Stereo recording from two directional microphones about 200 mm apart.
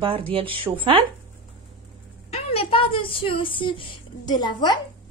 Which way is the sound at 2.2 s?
30° left (ahead or behind).